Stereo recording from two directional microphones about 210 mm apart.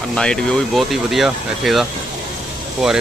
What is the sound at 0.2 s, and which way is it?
Speech, 5° left (ahead or behind).